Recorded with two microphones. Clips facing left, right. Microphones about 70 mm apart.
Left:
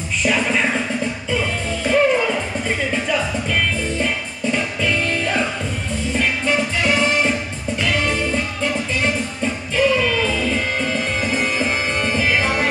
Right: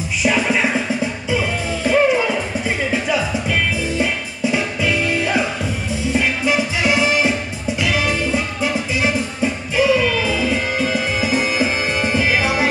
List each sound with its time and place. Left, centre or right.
0.2 s music: centre
1.9 s music: centre